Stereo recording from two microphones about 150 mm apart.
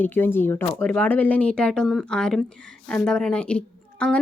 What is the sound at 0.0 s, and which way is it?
Speech, 15° left (ahead or behind).